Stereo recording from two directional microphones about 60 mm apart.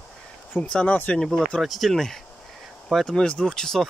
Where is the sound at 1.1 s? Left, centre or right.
Centre.